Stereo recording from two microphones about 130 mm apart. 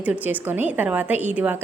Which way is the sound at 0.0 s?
15° right (ahead or behind).